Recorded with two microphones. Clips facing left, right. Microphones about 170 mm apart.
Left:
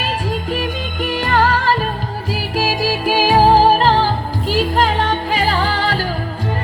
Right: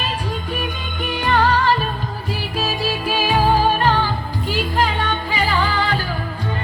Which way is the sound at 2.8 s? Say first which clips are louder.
Left 5 dB; 40° left (ahead or behind).